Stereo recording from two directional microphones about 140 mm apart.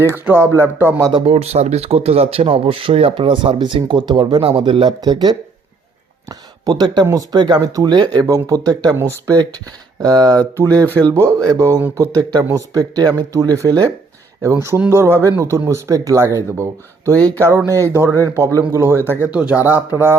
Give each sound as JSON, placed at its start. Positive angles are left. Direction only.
{"t": 0.0, "sound": "speech", "side_deg": -15}
{"t": 1.1, "sound": "speech", "side_deg": -45}
{"t": 11.9, "sound": "speech", "side_deg": -25}
{"t": 17.9, "sound": "speech", "side_deg": -20}